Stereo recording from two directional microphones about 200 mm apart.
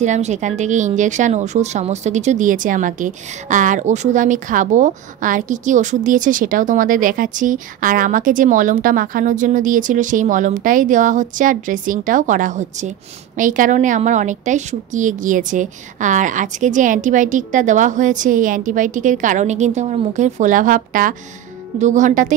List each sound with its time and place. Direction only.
0.0 s a woman's voice: 35° right (ahead or behind)